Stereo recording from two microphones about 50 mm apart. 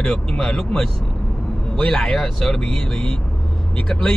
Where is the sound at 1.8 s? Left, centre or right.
Centre.